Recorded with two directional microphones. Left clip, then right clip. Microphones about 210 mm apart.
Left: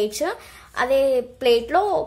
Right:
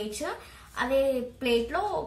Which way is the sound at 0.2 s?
55° left (ahead or behind).